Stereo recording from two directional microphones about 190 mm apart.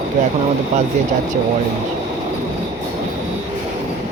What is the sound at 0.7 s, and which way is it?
Speech, 40° right (ahead or behind).